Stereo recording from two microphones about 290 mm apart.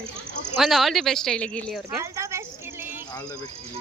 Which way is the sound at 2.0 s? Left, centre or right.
Centre.